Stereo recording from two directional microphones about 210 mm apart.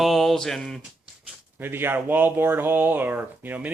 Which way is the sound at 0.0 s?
Centre (ahead or behind).